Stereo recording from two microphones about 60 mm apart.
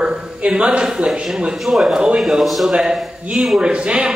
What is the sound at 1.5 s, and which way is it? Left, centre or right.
Speech, centre.